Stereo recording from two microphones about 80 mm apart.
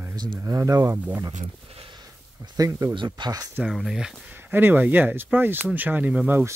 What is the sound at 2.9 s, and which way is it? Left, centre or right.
Speech, right.